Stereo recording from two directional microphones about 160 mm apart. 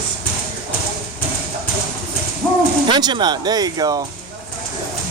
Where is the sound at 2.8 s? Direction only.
30° right (ahead or behind).